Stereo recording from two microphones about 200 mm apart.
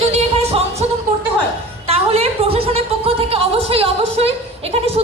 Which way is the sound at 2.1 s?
30° right (ahead or behind).